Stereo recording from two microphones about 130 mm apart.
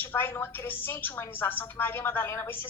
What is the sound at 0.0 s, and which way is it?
A woman's voice, 15° left (ahead or behind).